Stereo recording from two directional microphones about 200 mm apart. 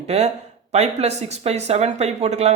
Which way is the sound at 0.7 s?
35° right (ahead or behind).